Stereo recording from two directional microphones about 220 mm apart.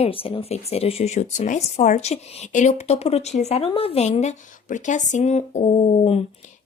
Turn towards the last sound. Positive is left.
turn(degrees=30)  # may be behind; listen again after turning